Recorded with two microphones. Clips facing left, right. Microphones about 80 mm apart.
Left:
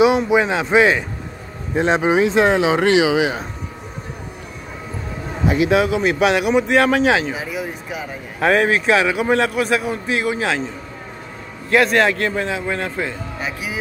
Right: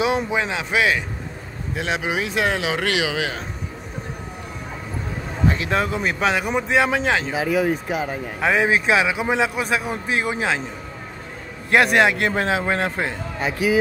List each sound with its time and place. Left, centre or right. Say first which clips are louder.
0.0 s speech: left 7 dB; centre
5.5 s speech: left 8 dB; centre
7.3 s speech: right 6 dB; right
7.9 s a man's voice: right 4 dB; right
8.4 s speech: left 4 dB; centre
8.6 s speech: left 2 dB; centre
9.8 s a man's voice: left 2 dB; right
11.7 s a man's voice: left 1 dB; centre
12.4 s a man's voice: right 1 dB; right